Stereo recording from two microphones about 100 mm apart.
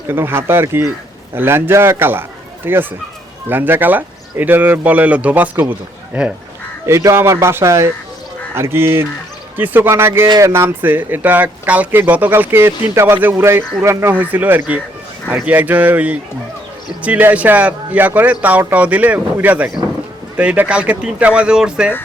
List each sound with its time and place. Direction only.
0.1 s speech: 20° right (ahead or behind)
6.8 s speech: 30° right (ahead or behind); by 21.9 s 10° right (ahead or behind)